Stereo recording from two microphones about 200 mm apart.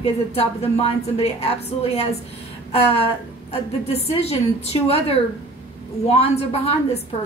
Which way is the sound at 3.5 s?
30° left (ahead or behind).